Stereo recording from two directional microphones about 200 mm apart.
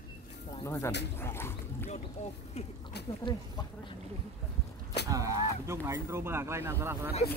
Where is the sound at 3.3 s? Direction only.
25° left (ahead or behind).